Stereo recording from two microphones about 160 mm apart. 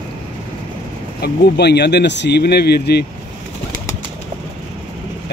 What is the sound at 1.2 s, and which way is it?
Speech, 90° left.